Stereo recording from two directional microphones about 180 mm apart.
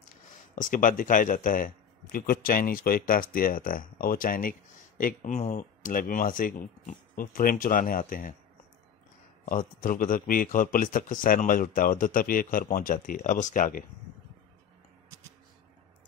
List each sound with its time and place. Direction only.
0.6 s speech: 50° left (ahead or behind)
9.5 s speech: 50° left (ahead or behind)